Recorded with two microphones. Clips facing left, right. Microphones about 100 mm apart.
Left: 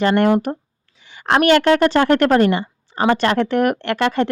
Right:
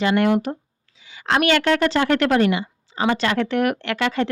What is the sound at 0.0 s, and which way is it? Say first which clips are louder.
Speech: left 3 dB; 50° left (ahead or behind).